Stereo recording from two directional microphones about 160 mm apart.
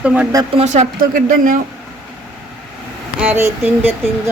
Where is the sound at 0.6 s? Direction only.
45° right (ahead or behind).